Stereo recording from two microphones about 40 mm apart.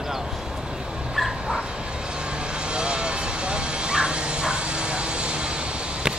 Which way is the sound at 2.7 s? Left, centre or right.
Right.